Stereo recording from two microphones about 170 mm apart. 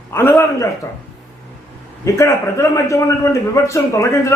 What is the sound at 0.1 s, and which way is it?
Speech, 15° left (ahead or behind).